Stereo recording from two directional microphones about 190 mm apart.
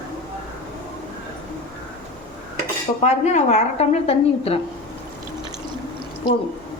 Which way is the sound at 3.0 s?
35° left (ahead or behind).